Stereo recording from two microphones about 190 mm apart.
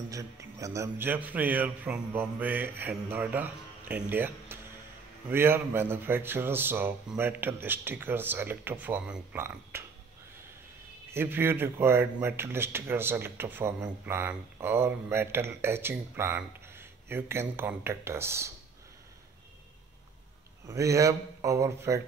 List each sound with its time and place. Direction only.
0.1 s speech: 15° right (ahead or behind)
11.1 s speech: 10° right (ahead or behind)
20.6 s speech: 15° right (ahead or behind)